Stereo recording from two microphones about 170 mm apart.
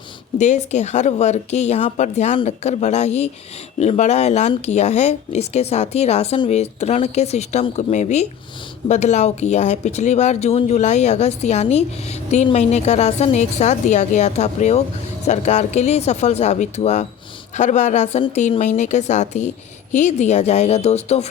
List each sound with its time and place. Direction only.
0.3 s speech: 45° left (ahead or behind)